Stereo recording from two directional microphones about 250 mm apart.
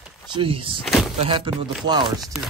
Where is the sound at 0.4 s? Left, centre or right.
Right.